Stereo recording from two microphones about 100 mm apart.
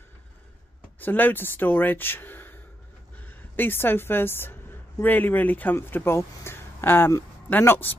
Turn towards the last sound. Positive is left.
turn(degrees=20)  # may be behind; listen again after turning